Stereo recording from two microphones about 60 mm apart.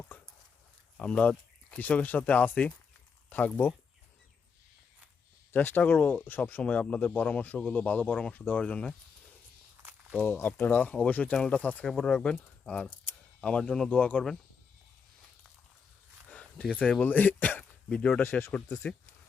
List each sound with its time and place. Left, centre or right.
0.9 s speech: left
5.5 s speech: left
10.2 s speech: left
10.7 s speech: left
13.9 s speech: left
16.3 s a sound: left
17.0 s speech: left
17.6 s a sound: centre
18.5 s speech: centre